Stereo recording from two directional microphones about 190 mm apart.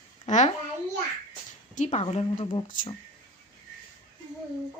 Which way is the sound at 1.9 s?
35° left (ahead or behind).